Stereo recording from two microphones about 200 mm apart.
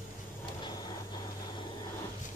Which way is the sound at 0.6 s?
20° left (ahead or behind).